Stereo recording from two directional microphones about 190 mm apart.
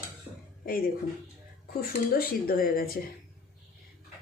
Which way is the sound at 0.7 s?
50° left (ahead or behind).